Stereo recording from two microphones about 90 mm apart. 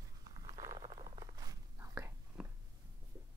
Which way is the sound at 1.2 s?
45° right (ahead or behind).